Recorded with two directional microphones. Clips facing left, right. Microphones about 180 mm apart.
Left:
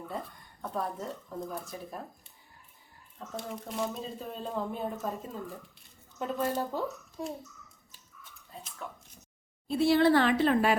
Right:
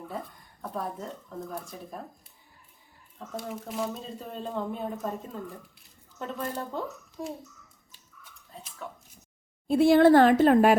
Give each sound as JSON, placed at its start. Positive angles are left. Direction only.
{"t": 0.6, "sound": "speech", "side_deg": 0}
{"t": 3.5, "sound": "speech", "side_deg": 0}
{"t": 8.8, "sound": "speech", "side_deg": 0}
{"t": 9.6, "sound": "speech", "side_deg": -50}